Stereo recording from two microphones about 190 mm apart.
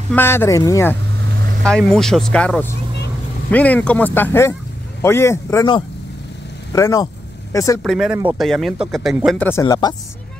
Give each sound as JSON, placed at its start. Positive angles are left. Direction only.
{"t": 0.1, "sound": "speech", "side_deg": 10}
{"t": 1.6, "sound": "speech", "side_deg": 5}
{"t": 7.8, "sound": "speech", "side_deg": 0}
{"t": 9.4, "sound": "speech", "side_deg": 15}